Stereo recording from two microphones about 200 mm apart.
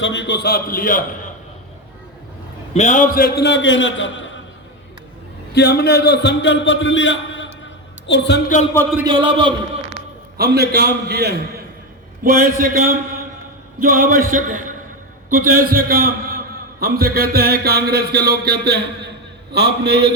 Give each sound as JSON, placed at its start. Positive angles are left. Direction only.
{"t": 0.0, "sound": "a man's voice", "side_deg": 65}
{"t": 2.7, "sound": "a man's voice", "side_deg": 35}
{"t": 5.5, "sound": "a man's voice", "side_deg": 55}
{"t": 9.0, "sound": "a man's voice", "side_deg": -25}
{"t": 10.3, "sound": "a man's voice", "side_deg": -50}